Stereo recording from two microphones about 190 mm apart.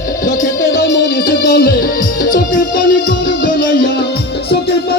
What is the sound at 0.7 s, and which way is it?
Music, 65° left (ahead or behind).